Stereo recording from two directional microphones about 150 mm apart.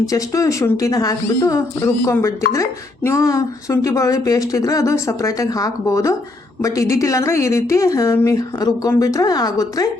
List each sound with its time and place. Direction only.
0.1 s speech: 20° left (ahead or behind)